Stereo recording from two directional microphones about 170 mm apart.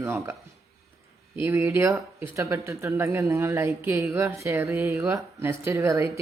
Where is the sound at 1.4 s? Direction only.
15° right (ahead or behind).